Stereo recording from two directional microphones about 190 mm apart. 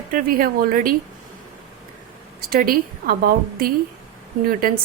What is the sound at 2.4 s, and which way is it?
A woman's voice, 50° right (ahead or behind).